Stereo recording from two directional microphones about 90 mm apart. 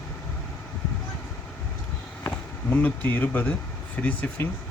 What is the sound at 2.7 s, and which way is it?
Speech, 20° left (ahead or behind).